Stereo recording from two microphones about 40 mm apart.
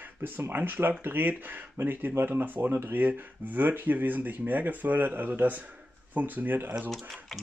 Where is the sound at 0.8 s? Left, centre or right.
Right.